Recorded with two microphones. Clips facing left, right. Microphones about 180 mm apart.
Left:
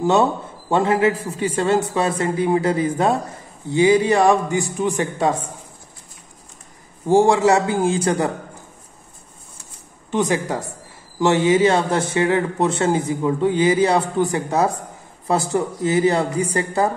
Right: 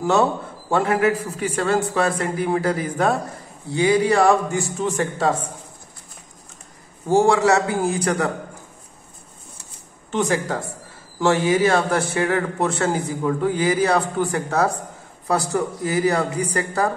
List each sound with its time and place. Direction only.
0.0 s a man's voice: 25° left (ahead or behind)
7.2 s a man's voice: 25° left (ahead or behind)
10.1 s a man's voice: 20° left (ahead or behind)